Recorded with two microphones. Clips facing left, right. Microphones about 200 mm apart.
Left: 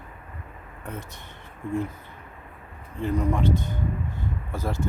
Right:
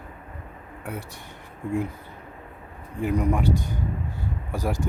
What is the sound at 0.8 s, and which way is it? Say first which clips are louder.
Speech: right 2 dB; 10° right (ahead or behind).